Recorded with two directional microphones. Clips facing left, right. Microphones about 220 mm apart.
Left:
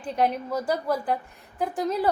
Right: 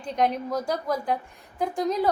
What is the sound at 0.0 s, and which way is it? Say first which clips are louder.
A woman's voice: even; 5° left (ahead or behind).